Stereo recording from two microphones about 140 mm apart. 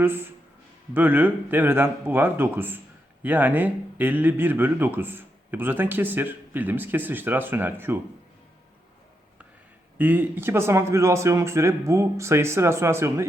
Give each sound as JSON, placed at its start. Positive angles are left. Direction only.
{"t": 0.0, "sound": "speech", "side_deg": -15}
{"t": 10.0, "sound": "speech", "side_deg": -15}